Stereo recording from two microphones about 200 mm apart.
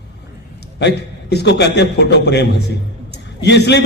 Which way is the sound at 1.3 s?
55° left (ahead or behind).